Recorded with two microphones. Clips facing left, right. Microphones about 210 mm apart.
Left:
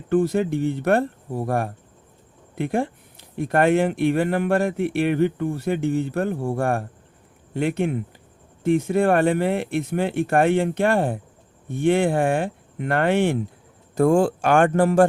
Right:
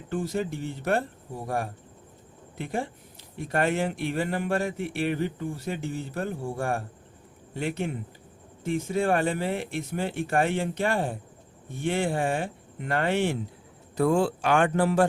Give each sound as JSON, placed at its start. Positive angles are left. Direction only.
{"t": 0.1, "sound": "speech", "side_deg": 60}
{"t": 13.9, "sound": "speech", "side_deg": 45}